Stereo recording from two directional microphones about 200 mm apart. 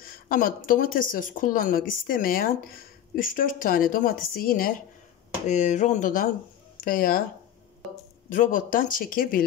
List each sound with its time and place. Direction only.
0.0 s a woman's voice: 45° left (ahead or behind)
8.3 s a woman's voice: 40° left (ahead or behind)